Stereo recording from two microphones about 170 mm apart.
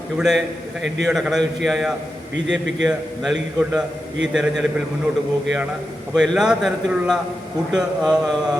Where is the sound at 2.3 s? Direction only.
90° right.